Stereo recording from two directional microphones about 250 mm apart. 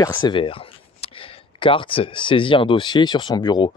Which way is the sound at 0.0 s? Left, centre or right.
Centre.